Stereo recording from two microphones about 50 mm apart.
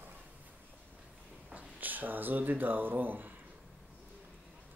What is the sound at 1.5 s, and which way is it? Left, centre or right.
Speech, right.